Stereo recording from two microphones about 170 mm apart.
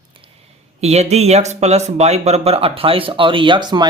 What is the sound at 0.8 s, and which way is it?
Speech, 40° right (ahead or behind).